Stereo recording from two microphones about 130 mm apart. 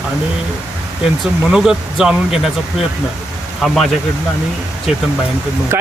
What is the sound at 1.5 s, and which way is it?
Speech, 5° right (ahead or behind).